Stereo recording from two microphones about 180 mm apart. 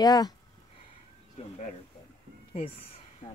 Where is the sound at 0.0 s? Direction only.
20° left (ahead or behind).